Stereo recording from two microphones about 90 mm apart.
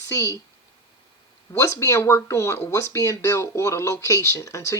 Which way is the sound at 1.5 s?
35° left (ahead or behind).